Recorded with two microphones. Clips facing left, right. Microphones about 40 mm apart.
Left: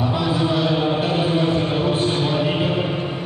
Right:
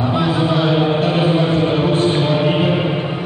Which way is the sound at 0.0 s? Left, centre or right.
Centre.